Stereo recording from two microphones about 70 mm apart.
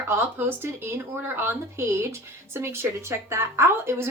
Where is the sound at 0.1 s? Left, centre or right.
Right.